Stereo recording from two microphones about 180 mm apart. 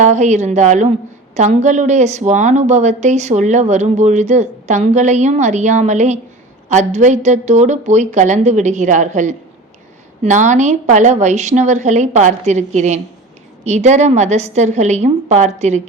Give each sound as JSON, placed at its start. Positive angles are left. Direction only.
{"t": 0.0, "sound": "a woman's voice", "side_deg": -40}